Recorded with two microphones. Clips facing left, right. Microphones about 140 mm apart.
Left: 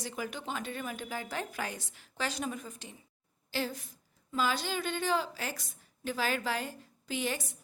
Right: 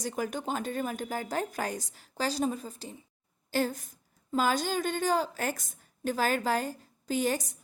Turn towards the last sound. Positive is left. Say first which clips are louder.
# right 6 dB
turn(degrees=-40)  # may be behind; listen again after turning